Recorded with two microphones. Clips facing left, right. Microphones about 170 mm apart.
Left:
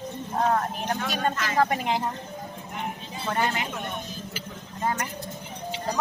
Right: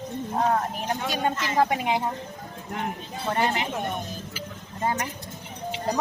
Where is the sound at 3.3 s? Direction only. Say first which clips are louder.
Right 2 dB; 25° right (ahead or behind).